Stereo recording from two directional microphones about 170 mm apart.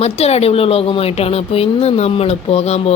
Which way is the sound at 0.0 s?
35° left (ahead or behind).